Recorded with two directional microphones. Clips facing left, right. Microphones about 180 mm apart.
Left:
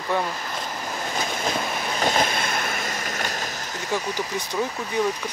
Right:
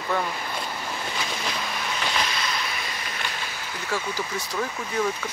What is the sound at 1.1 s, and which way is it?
Vehicle, 45° left (ahead or behind).